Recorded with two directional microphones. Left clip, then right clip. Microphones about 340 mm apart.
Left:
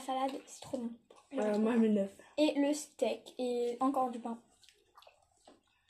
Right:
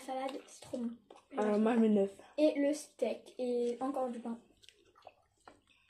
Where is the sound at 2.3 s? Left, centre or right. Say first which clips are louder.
Even; left.